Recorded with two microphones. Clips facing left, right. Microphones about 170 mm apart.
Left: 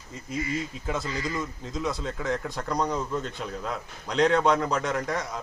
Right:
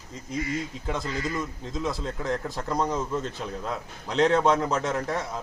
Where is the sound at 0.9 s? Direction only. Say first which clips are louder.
Right 1 dB; centre (ahead or behind).